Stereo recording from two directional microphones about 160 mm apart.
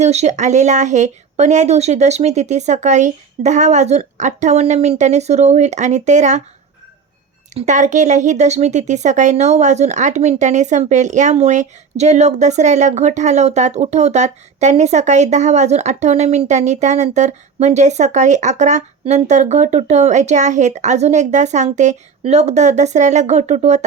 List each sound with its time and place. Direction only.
0.0 s speech: 45° right (ahead or behind)
7.5 s speech: 50° right (ahead or behind)